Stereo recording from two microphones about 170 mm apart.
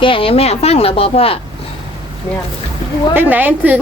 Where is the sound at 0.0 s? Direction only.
30° left (ahead or behind).